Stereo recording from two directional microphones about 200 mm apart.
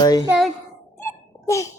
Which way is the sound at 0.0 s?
20° left (ahead or behind).